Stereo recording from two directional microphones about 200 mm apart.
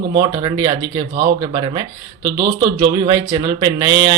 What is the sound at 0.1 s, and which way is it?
Speech, 20° right (ahead or behind).